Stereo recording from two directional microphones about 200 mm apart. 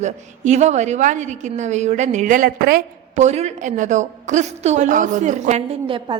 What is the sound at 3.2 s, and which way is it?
A woman's voice, 35° right (ahead or behind).